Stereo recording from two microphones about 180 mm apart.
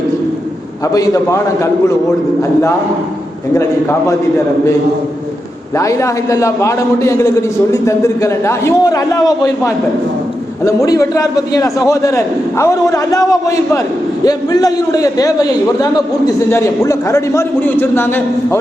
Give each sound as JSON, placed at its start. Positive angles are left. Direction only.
{"t": 0.9, "sound": "a man's voice", "side_deg": 15}
{"t": 3.5, "sound": "a man's voice", "side_deg": 15}
{"t": 5.7, "sound": "a man's voice", "side_deg": 15}